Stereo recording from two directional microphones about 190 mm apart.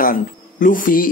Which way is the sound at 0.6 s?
45° left (ahead or behind).